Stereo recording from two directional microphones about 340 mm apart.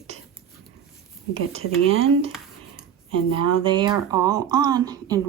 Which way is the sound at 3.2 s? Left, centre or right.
Left.